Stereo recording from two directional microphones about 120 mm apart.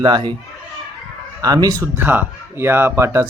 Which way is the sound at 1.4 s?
30° right (ahead or behind).